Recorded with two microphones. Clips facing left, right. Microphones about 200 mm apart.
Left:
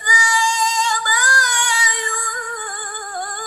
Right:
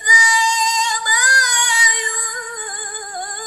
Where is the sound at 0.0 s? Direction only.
20° right (ahead or behind).